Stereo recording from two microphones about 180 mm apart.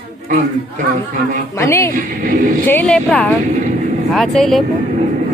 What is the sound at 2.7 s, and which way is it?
Vehicle, 5° left (ahead or behind).